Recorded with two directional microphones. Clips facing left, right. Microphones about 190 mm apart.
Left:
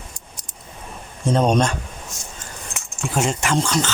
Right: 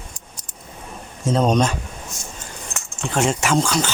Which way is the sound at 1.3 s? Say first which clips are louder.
Even; centre (ahead or behind).